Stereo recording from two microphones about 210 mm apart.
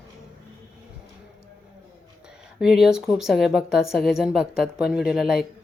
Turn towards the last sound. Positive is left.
turn(degrees=0)  # may be behind; listen again after turning